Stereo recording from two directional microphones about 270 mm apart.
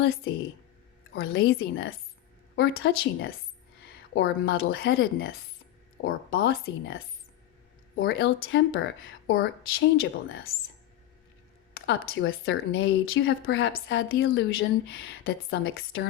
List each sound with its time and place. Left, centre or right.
1.1 s a woman's voice: left
8.0 s a woman's voice: left
11.7 s a woman's voice: left